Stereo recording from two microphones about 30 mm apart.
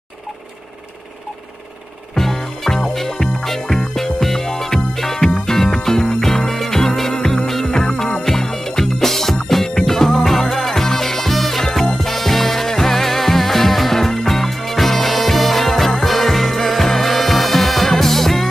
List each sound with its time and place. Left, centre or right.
2.1 s music: centre